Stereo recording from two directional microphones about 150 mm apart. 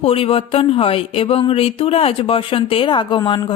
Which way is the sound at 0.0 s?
40° left (ahead or behind).